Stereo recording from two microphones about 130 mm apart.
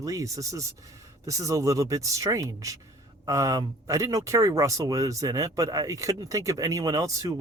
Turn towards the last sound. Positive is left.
turn(degrees=-25)  # may be behind; listen again after turning